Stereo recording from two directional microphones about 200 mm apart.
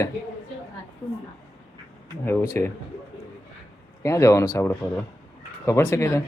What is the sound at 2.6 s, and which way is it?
Speech, 10° left (ahead or behind).